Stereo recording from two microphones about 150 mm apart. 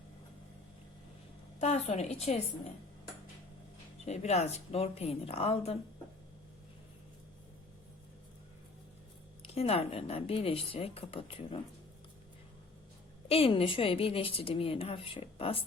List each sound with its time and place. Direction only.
1.5 s a woman's voice: 45° left (ahead or behind)
4.0 s a woman's voice: 45° left (ahead or behind)
9.5 s a woman's voice: 40° left (ahead or behind)
13.2 s a woman's voice: 40° left (ahead or behind)